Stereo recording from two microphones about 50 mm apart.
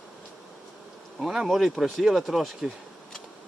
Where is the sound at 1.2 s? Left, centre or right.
Centre.